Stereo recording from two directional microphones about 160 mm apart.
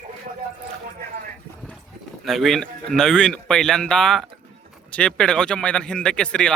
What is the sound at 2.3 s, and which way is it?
Speech, centre (ahead or behind).